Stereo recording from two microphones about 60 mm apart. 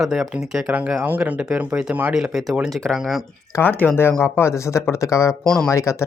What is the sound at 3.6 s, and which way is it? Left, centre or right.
Speech, left.